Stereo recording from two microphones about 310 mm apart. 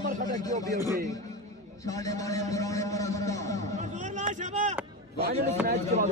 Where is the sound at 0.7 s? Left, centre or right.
Centre.